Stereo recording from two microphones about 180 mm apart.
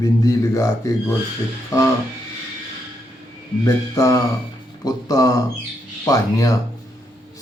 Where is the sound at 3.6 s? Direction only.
20° left (ahead or behind).